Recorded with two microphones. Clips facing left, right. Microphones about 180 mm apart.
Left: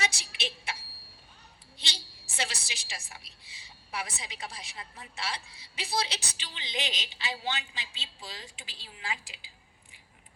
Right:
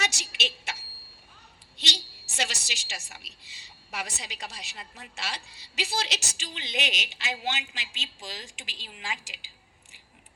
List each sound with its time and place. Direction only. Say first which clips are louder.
0.0 s a sound: right 2 dB; 75° right (ahead or behind)
1.7 s a woman's voice: right 7 dB; 80° right
6.3 s a woman's voice: right 5 dB; 45° right (ahead or behind)
6.7 s a woman's voice: right 2 dB; 75° right (ahead or behind)